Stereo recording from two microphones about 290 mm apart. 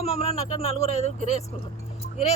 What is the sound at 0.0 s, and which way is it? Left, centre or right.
Speech, left.